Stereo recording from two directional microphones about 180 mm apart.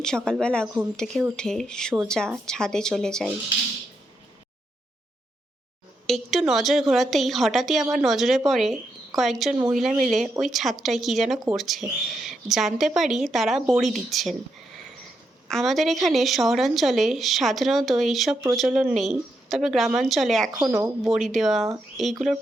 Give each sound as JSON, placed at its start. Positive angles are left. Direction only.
{"t": 0.3, "sound": "speech", "side_deg": 5}
{"t": 6.1, "sound": "speech", "side_deg": 0}
{"t": 15.4, "sound": "speech", "side_deg": 0}
{"t": 20.7, "sound": "a woman's voice", "side_deg": -15}
{"t": 21.0, "sound": "speech", "side_deg": 0}